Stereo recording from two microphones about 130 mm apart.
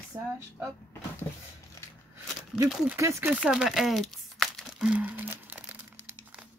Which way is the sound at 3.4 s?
5° right (ahead or behind).